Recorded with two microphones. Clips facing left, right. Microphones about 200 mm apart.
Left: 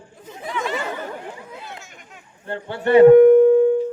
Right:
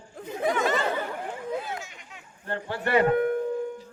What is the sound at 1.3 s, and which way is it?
Hubbub, 45° right (ahead or behind).